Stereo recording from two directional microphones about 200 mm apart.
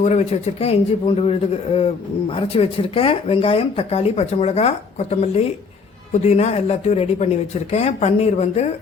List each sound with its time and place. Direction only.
0.0 s speech: 35° left (ahead or behind)